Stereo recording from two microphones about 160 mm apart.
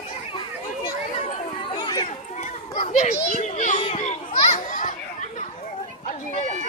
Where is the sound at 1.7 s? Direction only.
25° left (ahead or behind).